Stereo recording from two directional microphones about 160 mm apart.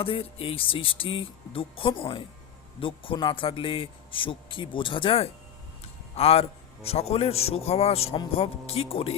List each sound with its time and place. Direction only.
0.0 s a man's voice: 35° left (ahead or behind)